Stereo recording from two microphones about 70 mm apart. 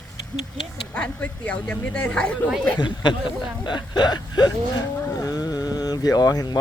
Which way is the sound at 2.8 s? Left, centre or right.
Left.